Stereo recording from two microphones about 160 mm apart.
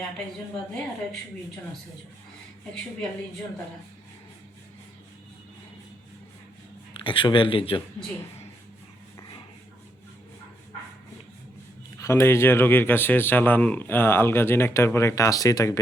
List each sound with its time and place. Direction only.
0.7 s a woman's voice: 5° left (ahead or behind)
6.9 s speech: 30° left (ahead or behind)
11.9 s speech: 15° left (ahead or behind)